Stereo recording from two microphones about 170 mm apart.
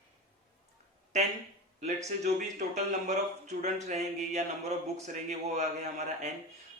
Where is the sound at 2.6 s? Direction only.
50° right (ahead or behind).